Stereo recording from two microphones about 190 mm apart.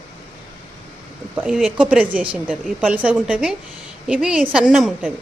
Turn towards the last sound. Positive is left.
turn(degrees=-5)  # may be behind; listen again after turning